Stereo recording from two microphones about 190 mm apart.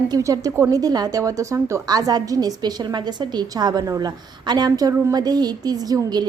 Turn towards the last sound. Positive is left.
turn(degrees=-20)  # may be behind; listen again after turning